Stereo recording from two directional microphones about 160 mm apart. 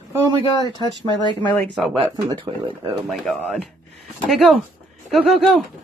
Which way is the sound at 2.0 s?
30° right (ahead or behind).